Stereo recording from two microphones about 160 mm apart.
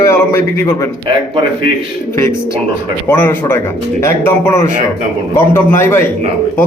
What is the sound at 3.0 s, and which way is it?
Speech, 15° left (ahead or behind).